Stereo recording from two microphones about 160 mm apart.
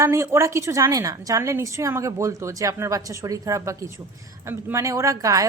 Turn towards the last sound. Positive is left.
turn(degrees=-20)  # may be behind; listen again after turning